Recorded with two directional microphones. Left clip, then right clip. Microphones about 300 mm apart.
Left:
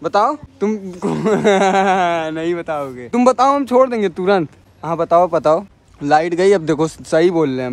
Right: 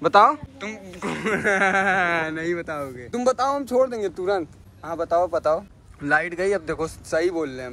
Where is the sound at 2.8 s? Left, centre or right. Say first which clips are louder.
Left 7 dB; left.